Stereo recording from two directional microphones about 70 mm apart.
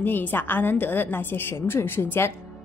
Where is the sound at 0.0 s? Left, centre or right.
Left.